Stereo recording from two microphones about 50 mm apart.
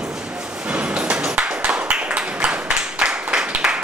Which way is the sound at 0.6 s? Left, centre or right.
Right.